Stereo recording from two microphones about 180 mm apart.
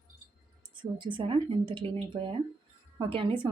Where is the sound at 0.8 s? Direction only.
25° right (ahead or behind).